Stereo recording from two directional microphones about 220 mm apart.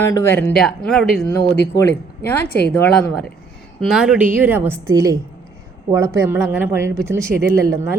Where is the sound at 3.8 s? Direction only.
Centre (ahead or behind).